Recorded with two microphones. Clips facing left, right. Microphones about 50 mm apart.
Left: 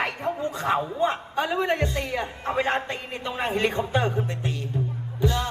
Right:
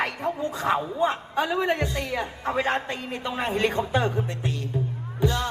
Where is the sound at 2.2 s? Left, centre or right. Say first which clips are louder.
Even; centre.